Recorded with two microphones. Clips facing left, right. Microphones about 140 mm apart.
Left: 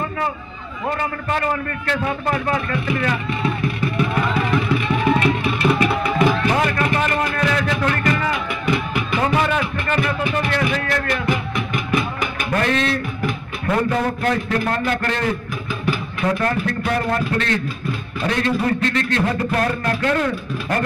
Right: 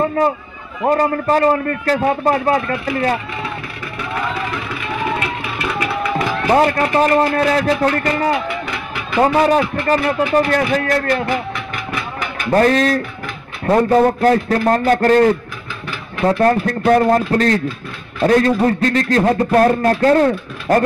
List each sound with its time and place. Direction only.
0.0 s a sound: 40° right (ahead or behind)
0.8 s speech: 40° right (ahead or behind)
6.5 s speech: 35° right (ahead or behind)
11.2 s music: 15° left (ahead or behind)
12.4 s speech: 40° right (ahead or behind)